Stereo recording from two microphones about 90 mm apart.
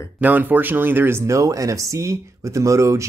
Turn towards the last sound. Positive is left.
turn(degrees=-35)  # may be behind; listen again after turning